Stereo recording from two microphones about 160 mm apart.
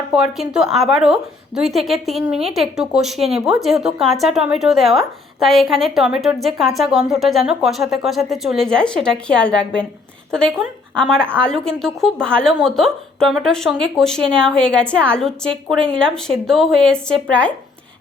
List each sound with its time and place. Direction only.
0.1 s a woman's voice: 5° right (ahead or behind)